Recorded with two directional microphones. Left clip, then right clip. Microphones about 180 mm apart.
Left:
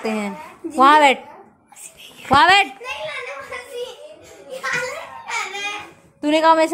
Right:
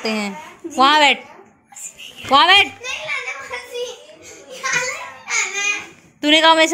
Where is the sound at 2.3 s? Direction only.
15° left (ahead or behind).